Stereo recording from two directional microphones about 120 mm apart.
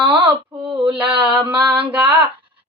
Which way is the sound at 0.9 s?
10° right (ahead or behind).